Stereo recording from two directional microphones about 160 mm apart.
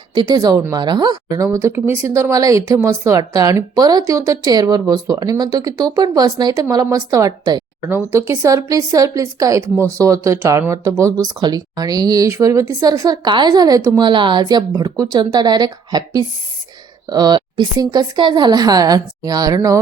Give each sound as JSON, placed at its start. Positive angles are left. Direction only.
{"t": 0.1, "sound": "speech", "side_deg": -25}